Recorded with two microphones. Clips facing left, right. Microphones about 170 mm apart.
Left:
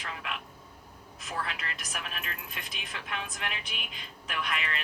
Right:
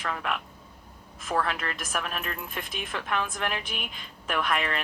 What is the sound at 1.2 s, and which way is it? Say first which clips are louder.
Speech: right 8 dB; 55° right (ahead or behind).